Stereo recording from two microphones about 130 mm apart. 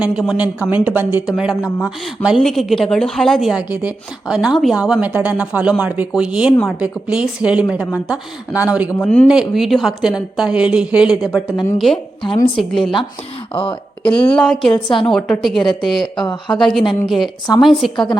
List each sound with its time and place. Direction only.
0.0 s a woman's voice: 5° right (ahead or behind)
13.5 s speech: 45° left (ahead or behind)
14.1 s a woman's voice: 10° left (ahead or behind)
14.7 s speech: 40° left (ahead or behind)
15.1 s a woman's voice: centre (ahead or behind)
16.2 s speech: 35° left (ahead or behind)
16.6 s a woman's voice: centre (ahead or behind)